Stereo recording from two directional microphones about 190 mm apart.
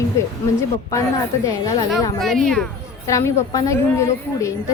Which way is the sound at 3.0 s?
15° left (ahead or behind).